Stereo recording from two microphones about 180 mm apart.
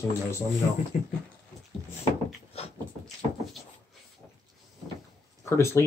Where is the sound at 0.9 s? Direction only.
50° left (ahead or behind).